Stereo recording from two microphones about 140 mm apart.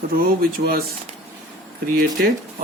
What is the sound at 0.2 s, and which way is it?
Speech, 90° right.